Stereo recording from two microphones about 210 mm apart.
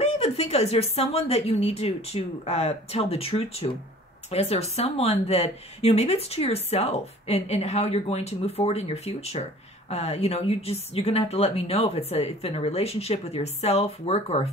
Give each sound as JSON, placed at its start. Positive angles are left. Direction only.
{"t": 0.0, "sound": "speech", "side_deg": 30}